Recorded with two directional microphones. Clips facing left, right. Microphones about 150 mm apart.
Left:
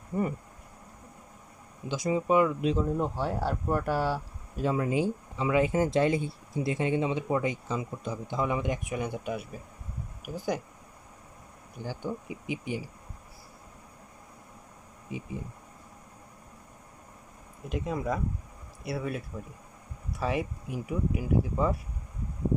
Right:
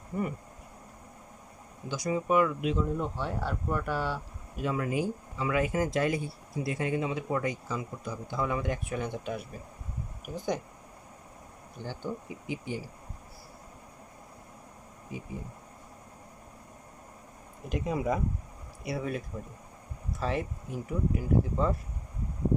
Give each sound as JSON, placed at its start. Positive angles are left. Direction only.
{"t": 1.9, "sound": "speech", "side_deg": 20}
{"t": 2.6, "sound": "speech", "side_deg": 35}
{"t": 11.8, "sound": "speech", "side_deg": 10}
{"t": 15.1, "sound": "speech", "side_deg": 20}
{"t": 17.7, "sound": "speech", "side_deg": 0}